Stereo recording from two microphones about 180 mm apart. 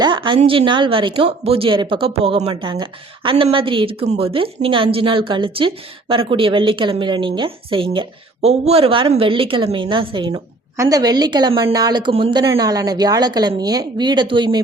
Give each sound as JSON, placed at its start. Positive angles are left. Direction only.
{"t": 0.0, "sound": "a woman's voice", "side_deg": -25}